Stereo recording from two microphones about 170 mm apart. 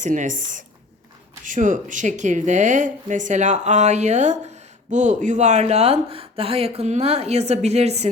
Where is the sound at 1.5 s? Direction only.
50° right (ahead or behind).